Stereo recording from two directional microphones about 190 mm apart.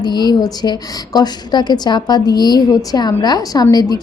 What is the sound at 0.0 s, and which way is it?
A woman's voice, 20° left (ahead or behind).